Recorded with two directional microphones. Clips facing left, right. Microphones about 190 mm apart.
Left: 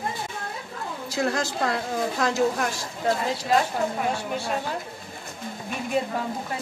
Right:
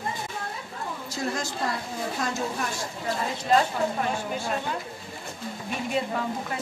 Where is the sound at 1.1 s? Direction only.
75° left (ahead or behind).